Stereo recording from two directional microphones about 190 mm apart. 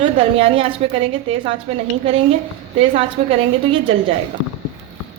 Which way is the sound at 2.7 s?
30° right (ahead or behind).